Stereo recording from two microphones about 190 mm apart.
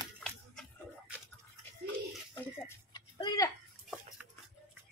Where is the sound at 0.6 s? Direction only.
5° right (ahead or behind).